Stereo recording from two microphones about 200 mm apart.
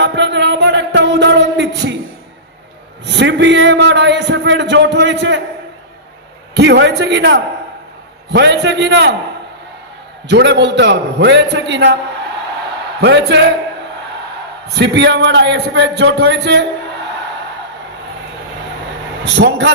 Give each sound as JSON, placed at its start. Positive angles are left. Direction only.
{"t": 0.0, "sound": "music", "side_deg": -60}
{"t": 3.1, "sound": "speech", "side_deg": -60}
{"t": 6.5, "sound": "speech", "side_deg": -60}
{"t": 10.2, "sound": "speech", "side_deg": -60}
{"t": 13.0, "sound": "speech", "side_deg": -60}
{"t": 14.8, "sound": "speech", "side_deg": -60}
{"t": 19.2, "sound": "speech", "side_deg": -60}